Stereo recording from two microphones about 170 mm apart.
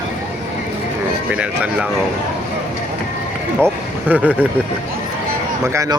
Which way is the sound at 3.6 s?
10° right (ahead or behind).